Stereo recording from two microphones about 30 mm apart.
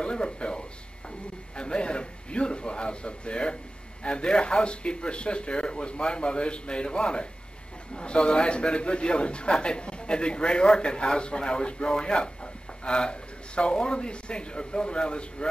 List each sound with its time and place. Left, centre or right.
0.0 s a man's voice: left